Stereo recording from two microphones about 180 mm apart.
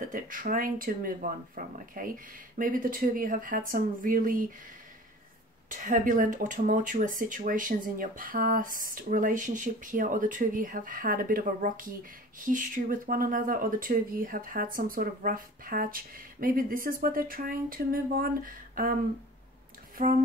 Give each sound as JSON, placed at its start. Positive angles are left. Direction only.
{"t": 0.0, "sound": "speech", "side_deg": -50}
{"t": 5.7, "sound": "speech", "side_deg": -45}
{"t": 20.0, "sound": "speech", "side_deg": -50}